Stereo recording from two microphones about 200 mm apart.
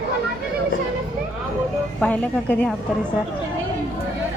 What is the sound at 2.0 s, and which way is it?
Speech, 5° left (ahead or behind).